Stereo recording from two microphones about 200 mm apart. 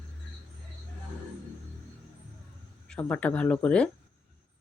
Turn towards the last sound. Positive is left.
turn(degrees=5)  # may be behind; listen again after turning